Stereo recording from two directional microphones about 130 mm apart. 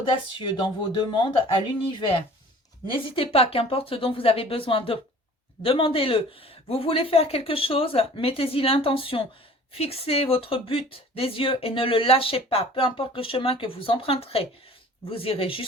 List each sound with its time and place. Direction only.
0.0 s speech: 40° left (ahead or behind)